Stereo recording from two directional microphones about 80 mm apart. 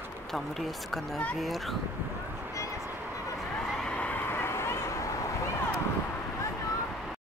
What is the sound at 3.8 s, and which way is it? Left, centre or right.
Neigh, centre.